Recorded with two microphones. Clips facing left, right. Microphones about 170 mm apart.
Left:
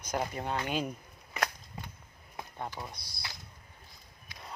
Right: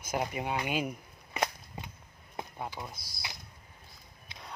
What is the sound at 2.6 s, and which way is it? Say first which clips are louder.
Speech: left 2 dB; 10° right (ahead or behind).